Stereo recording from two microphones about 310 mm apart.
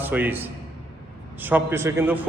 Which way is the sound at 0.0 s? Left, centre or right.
Centre.